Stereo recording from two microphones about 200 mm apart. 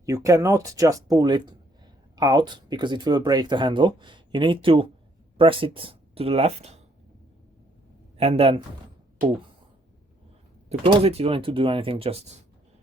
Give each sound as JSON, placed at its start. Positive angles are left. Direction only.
{"t": 0.0, "sound": "speech", "side_deg": -15}
{"t": 8.2, "sound": "speech", "side_deg": -30}
{"t": 10.7, "sound": "speech", "side_deg": -30}